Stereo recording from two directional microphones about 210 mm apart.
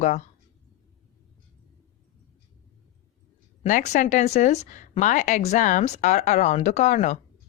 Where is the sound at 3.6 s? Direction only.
35° left (ahead or behind).